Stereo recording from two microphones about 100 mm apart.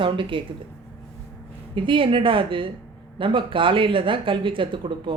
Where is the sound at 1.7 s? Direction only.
60° right (ahead or behind).